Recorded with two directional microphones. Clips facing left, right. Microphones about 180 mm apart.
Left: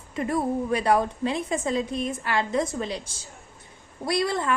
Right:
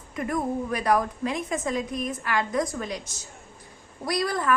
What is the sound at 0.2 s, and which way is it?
A woman's voice, 30° left (ahead or behind).